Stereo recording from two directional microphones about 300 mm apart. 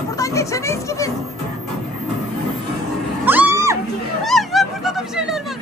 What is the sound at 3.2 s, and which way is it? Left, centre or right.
Music, centre.